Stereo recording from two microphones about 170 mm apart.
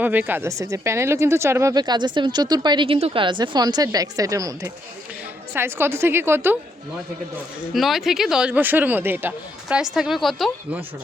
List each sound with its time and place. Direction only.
0.0 s a woman's voice: 10° right (ahead or behind)
7.7 s speech: centre (ahead or behind)